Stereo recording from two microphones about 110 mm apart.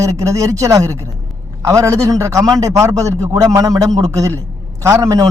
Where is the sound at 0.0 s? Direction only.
25° right (ahead or behind).